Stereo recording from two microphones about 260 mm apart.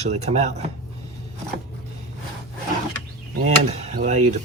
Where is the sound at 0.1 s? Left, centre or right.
Right.